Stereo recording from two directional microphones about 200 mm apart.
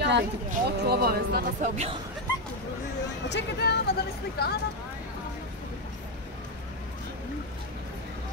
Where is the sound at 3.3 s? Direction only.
60° left (ahead or behind).